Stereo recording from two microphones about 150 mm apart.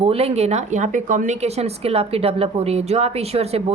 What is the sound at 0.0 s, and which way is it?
A woman's voice, 40° right (ahead or behind).